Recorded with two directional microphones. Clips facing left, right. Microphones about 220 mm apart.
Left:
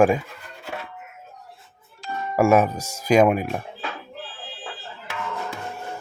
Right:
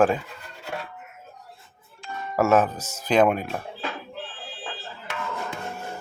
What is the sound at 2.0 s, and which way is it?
Music, 40° left (ahead or behind).